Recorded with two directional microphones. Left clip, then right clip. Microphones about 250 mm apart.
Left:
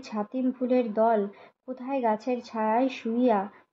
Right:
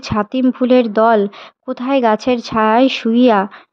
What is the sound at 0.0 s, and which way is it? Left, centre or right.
Speech, right.